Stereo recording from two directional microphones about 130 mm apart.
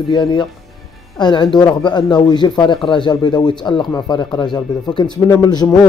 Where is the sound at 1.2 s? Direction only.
35° left (ahead or behind).